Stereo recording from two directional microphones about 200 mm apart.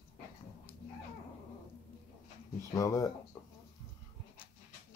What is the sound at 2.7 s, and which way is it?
Speech, 15° left (ahead or behind).